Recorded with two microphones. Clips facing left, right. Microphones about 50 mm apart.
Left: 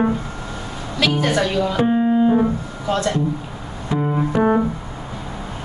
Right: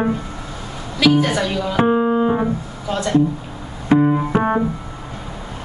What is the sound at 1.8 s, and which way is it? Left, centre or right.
Music, right.